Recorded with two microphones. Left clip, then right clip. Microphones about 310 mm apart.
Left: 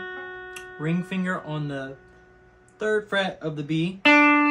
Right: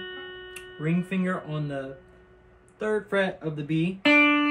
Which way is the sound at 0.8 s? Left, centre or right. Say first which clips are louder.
Even; centre.